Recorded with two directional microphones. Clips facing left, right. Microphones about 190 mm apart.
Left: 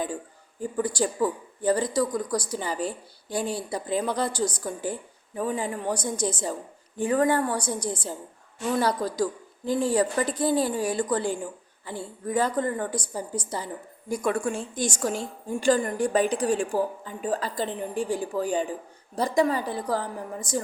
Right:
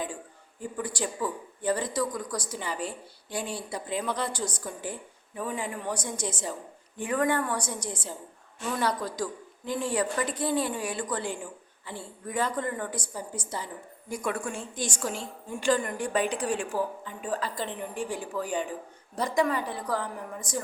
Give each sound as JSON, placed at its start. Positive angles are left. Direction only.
{"t": 0.8, "sound": "a woman's voice", "side_deg": 35}